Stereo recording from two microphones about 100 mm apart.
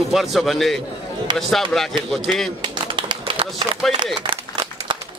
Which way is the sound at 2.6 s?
50° right (ahead or behind).